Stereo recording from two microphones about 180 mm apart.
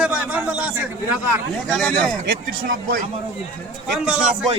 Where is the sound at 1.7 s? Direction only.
5° left (ahead or behind).